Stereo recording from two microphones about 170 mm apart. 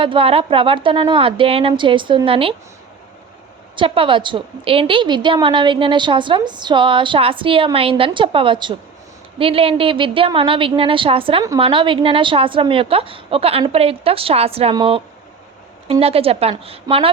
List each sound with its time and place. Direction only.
0.0 s a woman's voice: 30° right (ahead or behind)
3.8 s a woman's voice: 30° right (ahead or behind)